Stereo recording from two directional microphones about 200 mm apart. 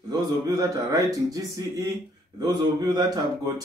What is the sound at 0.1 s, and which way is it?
Speech, 20° right (ahead or behind).